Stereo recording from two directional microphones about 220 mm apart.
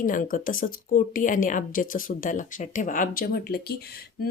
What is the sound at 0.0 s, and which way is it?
A woman's voice, 35° left (ahead or behind).